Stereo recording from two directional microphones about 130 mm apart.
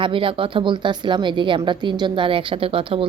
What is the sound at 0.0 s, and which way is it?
Speech, 40° right (ahead or behind).